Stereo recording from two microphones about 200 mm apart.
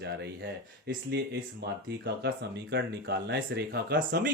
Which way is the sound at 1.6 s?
55° right (ahead or behind).